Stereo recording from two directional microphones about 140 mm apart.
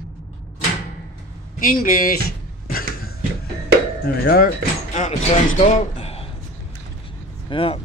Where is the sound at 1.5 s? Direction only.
85° left.